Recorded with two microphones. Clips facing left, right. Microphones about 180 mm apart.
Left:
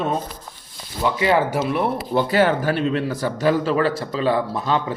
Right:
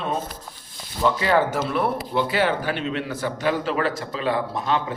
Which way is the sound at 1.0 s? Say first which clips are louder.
Left 1 dB; 15° left (ahead or behind).